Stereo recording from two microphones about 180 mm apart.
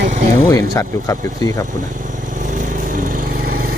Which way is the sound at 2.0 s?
45° right (ahead or behind).